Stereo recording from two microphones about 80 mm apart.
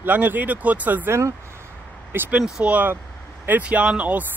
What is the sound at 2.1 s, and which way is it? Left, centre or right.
Speech, right.